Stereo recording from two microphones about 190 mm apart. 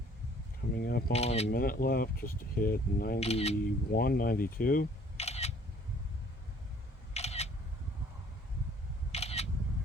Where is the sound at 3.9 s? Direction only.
50° left (ahead or behind).